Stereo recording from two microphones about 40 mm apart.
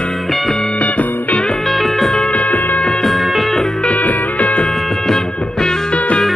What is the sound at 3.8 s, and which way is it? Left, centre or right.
Music, left.